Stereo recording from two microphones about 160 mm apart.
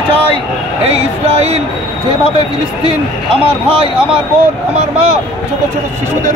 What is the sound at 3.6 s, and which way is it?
Speech, 35° right (ahead or behind).